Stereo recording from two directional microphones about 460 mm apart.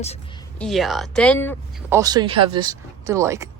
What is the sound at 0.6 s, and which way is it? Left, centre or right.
Speech, centre.